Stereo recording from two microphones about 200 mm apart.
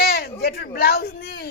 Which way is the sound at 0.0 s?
50° left (ahead or behind).